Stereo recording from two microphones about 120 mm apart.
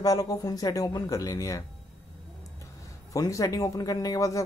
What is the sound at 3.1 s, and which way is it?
Speech, 30° left (ahead or behind).